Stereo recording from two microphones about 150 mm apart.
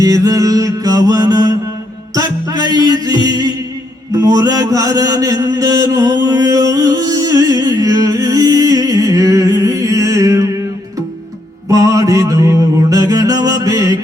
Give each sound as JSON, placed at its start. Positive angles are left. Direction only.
{"t": 0.0, "sound": "music", "side_deg": -25}
{"t": 11.7, "sound": "music", "side_deg": -20}